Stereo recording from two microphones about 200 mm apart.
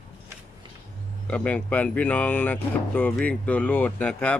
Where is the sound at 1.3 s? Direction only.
5° left (ahead or behind).